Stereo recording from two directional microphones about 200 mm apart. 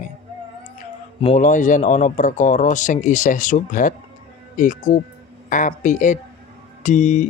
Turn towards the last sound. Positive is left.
turn(degrees=35)  # may be behind; listen again after turning